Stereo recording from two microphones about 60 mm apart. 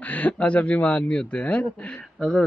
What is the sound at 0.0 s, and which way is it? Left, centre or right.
Speech, left.